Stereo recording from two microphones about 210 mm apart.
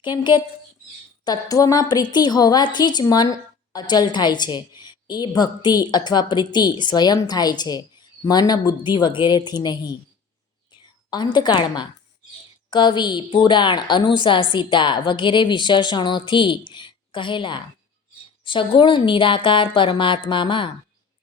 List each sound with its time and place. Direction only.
0.0 s a woman's voice: 20° left (ahead or behind)
11.1 s a woman's voice: 20° left (ahead or behind)